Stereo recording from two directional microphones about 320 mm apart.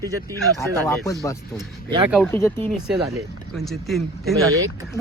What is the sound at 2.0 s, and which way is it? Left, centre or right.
Speech, centre.